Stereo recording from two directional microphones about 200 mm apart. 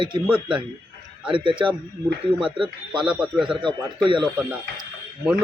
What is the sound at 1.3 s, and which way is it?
A man's voice, 25° right (ahead or behind).